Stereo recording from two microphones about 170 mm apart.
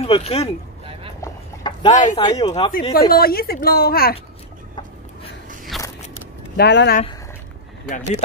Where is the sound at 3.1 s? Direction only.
65° left (ahead or behind).